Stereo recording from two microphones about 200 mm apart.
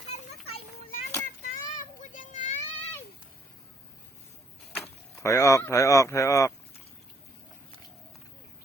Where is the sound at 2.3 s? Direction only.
35° left (ahead or behind).